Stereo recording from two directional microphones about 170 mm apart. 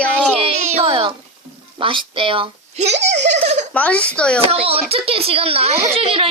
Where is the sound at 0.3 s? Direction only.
35° right (ahead or behind).